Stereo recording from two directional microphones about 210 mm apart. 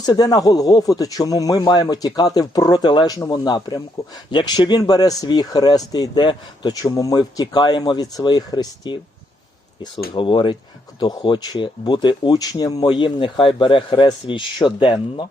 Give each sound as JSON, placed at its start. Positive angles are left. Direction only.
{"t": 0.0, "sound": "a man's voice", "side_deg": 20}
{"t": 10.2, "sound": "a man's voice", "side_deg": 25}